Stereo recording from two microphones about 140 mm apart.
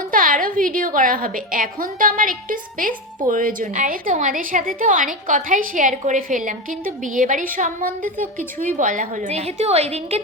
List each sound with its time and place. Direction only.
0.1 s a woman's voice: 75° right (ahead or behind)
8.8 s a woman's voice: 65° right (ahead or behind); by 10.2 s 50° right (ahead or behind)